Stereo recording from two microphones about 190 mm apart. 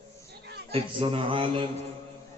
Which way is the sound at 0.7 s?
30° right (ahead or behind).